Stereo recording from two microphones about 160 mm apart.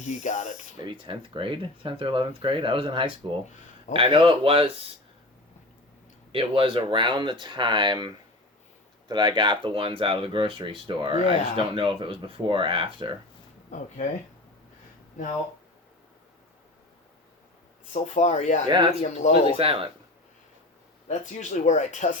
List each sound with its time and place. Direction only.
0.1 s speech: 50° left (ahead or behind)
0.8 s speech: 30° right (ahead or behind)
6.3 s speech: 35° right (ahead or behind)
13.7 s speech: 50° left (ahead or behind)
17.9 s speech: 45° left (ahead or behind)
18.7 s speech: 30° right (ahead or behind)
18.9 s speech: 45° left (ahead or behind)
19.5 s speech: 35° right (ahead or behind)
21.1 s speech: 45° left (ahead or behind)